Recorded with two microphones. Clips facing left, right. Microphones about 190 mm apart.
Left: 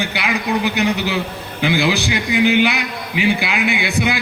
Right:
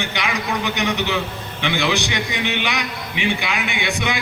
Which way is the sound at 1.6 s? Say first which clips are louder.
Left 4 dB; 35° left (ahead or behind).